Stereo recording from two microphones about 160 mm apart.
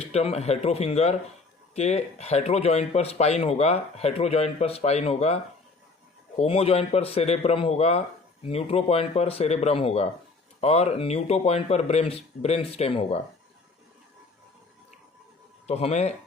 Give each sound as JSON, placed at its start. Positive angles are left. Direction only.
{"t": 0.0, "sound": "speech", "side_deg": 40}
{"t": 15.6, "sound": "speech", "side_deg": 40}